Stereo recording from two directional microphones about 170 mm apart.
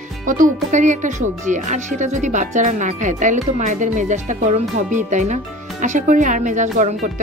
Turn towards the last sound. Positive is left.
turn(degrees=-45)  # may be behind; listen again after turning